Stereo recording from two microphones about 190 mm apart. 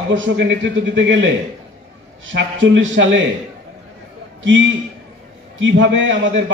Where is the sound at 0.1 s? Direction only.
80° right.